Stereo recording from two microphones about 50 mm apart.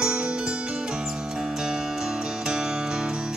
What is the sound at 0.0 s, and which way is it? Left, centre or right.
Music, right.